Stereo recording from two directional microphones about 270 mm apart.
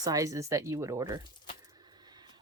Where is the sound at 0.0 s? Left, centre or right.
Centre.